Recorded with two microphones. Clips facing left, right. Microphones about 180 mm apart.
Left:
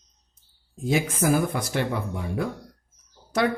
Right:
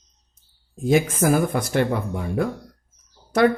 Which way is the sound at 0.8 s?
50° right (ahead or behind).